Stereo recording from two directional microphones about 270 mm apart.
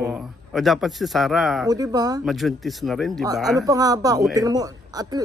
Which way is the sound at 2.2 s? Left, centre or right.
Centre.